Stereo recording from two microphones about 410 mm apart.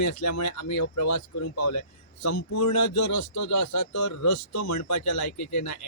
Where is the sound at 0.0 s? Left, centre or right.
Left.